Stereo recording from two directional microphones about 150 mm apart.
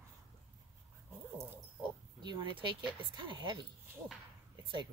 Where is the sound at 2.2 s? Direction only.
30° right (ahead or behind).